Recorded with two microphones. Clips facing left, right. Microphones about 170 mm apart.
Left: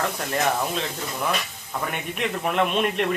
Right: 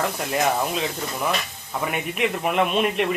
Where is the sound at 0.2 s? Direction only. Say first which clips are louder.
Right 2 dB; 5° right (ahead or behind).